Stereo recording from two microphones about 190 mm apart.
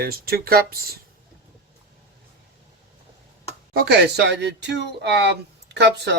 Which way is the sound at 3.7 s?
60° right (ahead or behind).